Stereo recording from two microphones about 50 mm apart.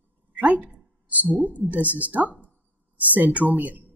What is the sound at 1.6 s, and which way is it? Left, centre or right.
Speech, right.